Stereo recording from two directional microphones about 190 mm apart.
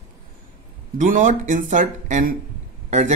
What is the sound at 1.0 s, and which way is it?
A man's voice, 40° right (ahead or behind).